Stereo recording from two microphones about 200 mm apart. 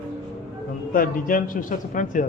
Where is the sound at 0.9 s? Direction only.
45° left (ahead or behind).